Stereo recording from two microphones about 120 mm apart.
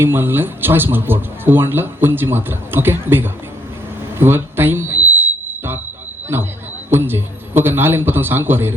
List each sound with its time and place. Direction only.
0.0 s speech: 20° right (ahead or behind)
4.2 s a sound: 20° right (ahead or behind)
6.3 s speech: 20° right (ahead or behind)